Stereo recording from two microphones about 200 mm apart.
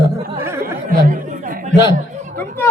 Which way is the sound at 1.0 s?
45° right (ahead or behind).